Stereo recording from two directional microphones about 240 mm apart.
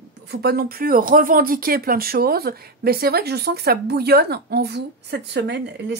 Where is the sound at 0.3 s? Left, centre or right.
Right.